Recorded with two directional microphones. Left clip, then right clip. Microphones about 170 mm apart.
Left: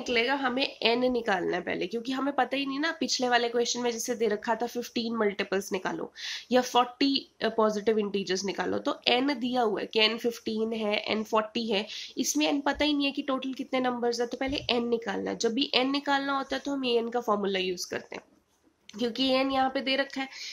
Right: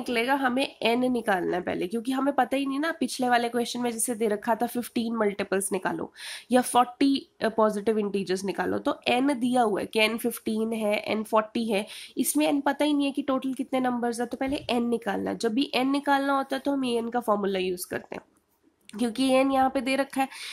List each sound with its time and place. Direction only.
0.0 s speech: 40° right (ahead or behind)